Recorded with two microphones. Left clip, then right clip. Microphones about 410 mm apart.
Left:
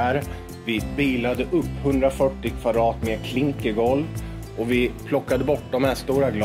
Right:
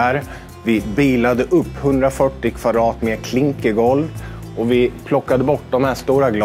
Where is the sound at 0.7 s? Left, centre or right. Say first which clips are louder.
Right 7 dB; right.